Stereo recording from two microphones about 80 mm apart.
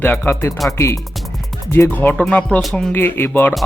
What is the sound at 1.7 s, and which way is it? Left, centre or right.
Speech, left.